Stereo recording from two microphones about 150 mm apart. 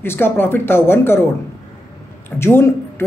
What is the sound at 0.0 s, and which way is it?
Speech, 15° left (ahead or behind).